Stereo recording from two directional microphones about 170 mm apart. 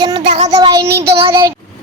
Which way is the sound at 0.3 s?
40° right (ahead or behind).